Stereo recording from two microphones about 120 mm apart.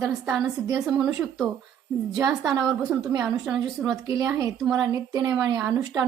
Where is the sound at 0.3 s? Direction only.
Centre (ahead or behind).